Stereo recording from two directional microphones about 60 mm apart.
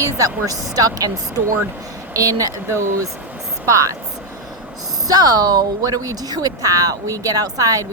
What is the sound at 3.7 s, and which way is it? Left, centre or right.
Speech, right.